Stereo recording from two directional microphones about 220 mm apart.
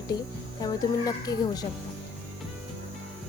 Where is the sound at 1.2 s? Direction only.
15° left (ahead or behind).